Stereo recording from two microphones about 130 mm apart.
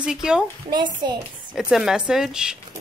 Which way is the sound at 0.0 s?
5° right (ahead or behind).